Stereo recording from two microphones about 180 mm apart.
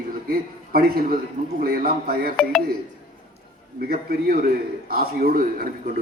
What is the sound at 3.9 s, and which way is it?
A man's voice, 55° right (ahead or behind).